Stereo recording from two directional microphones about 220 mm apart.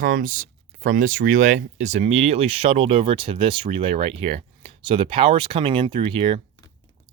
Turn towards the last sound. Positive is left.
turn(degrees=-25)  # may be behind; listen again after turning